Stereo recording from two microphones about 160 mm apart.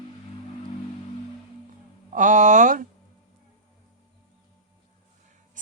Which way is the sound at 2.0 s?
55° right (ahead or behind).